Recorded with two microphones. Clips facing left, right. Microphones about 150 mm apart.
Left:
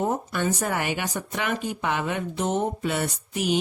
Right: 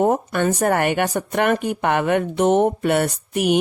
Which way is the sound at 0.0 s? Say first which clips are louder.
Right 7 dB; 60° right (ahead or behind).